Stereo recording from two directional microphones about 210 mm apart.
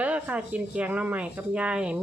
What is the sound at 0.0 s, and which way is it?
Speech, 5° right (ahead or behind).